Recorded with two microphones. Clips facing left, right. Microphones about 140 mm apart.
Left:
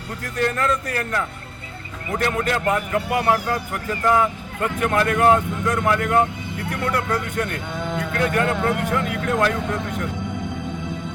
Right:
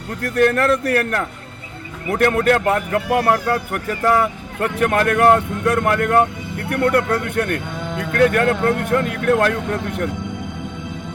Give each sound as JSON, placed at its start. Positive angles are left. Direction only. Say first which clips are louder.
{"t": 0.2, "sound": "a man's voice", "louder": "right 7 dB", "side_deg": -65}